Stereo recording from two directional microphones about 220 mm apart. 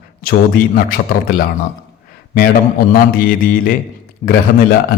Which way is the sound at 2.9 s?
40° left (ahead or behind).